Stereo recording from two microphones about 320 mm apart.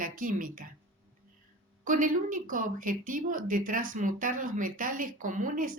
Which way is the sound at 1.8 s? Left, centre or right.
Right.